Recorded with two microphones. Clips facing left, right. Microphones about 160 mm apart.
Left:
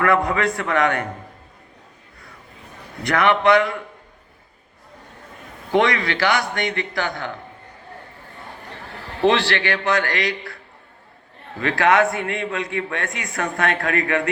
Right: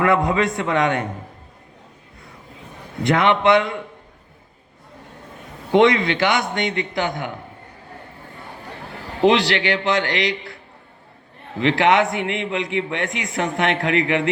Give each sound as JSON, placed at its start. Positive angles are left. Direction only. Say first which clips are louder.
{"t": 0.0, "sound": "a man's voice", "louder": "right 1 dB", "side_deg": -20}
{"t": 3.0, "sound": "a man's voice", "louder": "right 1 dB", "side_deg": -20}
{"t": 5.7, "sound": "a man's voice", "louder": "right 4 dB", "side_deg": -20}
{"t": 9.2, "sound": "a man's voice", "louder": "right 2 dB", "side_deg": -15}
{"t": 11.6, "sound": "a man's voice", "louder": "right 1 dB", "side_deg": -20}